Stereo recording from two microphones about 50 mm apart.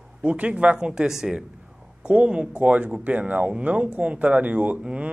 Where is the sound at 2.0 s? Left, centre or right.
Right.